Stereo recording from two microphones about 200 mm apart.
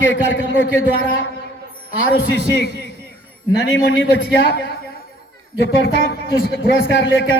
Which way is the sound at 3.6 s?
70° left (ahead or behind).